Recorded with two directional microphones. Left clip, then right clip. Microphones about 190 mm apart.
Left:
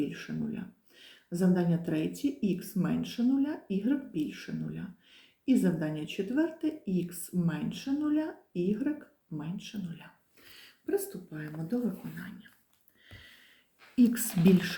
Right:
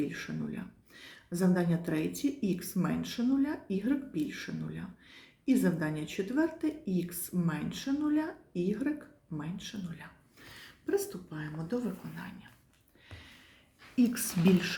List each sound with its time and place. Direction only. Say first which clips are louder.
0.0 s speech: left 1 dB; 15° right (ahead or behind)
13.9 s speech: left 3 dB; 5° left (ahead or behind)